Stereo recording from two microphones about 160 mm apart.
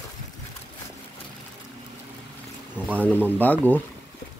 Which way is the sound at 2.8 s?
10° left (ahead or behind).